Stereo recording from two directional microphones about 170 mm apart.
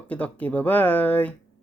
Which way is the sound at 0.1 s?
10° left (ahead or behind).